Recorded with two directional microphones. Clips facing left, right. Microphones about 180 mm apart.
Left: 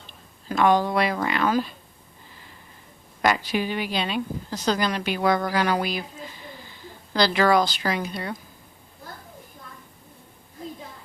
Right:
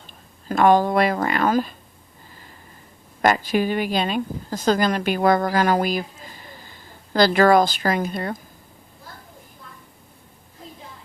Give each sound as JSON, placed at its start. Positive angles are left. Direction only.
{"t": 0.4, "sound": "speech", "side_deg": -45}
{"t": 3.2, "sound": "speech", "side_deg": -45}